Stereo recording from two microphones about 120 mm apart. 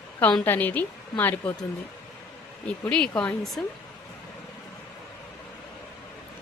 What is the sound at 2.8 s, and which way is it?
Speech, 10° left (ahead or behind).